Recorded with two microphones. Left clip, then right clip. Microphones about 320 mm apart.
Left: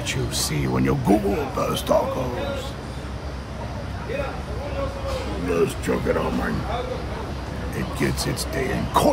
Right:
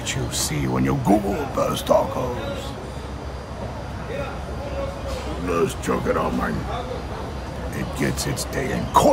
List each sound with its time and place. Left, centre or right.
0.0 s speech: centre
5.5 s speech: centre
7.7 s speech: centre